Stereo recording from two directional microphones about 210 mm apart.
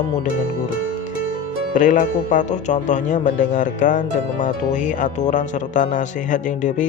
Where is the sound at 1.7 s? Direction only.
40° left (ahead or behind).